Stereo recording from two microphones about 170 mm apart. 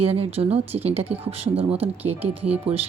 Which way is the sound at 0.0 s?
35° right (ahead or behind).